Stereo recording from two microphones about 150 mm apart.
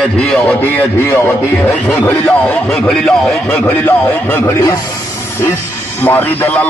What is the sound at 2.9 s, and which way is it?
Speech, 5° left (ahead or behind).